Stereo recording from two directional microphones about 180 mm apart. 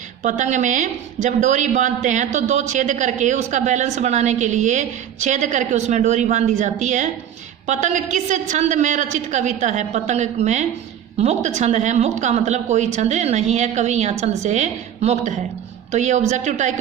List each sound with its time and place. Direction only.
0.2 s speech: 40° right (ahead or behind)